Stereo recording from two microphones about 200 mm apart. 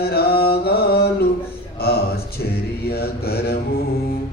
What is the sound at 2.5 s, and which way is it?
Mantra, 50° left (ahead or behind).